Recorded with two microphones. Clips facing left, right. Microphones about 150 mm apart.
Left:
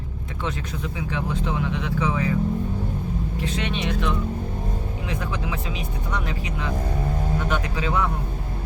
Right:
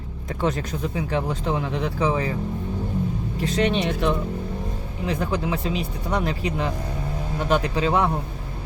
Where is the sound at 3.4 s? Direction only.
40° right (ahead or behind).